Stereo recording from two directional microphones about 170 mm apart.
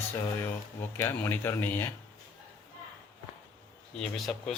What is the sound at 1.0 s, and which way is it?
Speech, 10° left (ahead or behind).